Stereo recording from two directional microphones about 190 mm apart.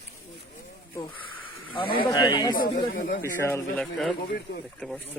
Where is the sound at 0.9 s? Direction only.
25° left (ahead or behind).